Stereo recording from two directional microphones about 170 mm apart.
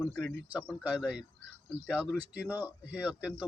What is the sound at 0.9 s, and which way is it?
Speech, 5° right (ahead or behind).